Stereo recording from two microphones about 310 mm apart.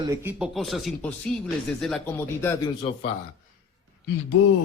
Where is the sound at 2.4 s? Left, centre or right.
Centre.